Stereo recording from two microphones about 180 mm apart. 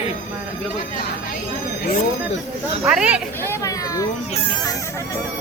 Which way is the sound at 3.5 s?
20° left (ahead or behind).